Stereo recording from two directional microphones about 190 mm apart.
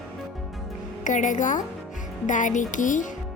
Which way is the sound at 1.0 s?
40° left (ahead or behind).